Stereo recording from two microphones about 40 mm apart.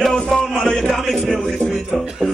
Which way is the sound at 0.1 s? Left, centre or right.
Centre.